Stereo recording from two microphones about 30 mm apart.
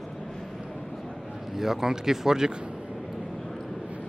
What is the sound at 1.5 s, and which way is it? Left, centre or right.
Speech, centre.